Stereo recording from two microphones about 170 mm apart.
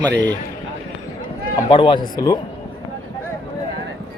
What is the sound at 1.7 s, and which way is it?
Speech, 30° left (ahead or behind).